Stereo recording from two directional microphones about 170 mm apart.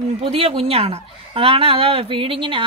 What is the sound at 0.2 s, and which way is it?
A woman's voice, 35° right (ahead or behind).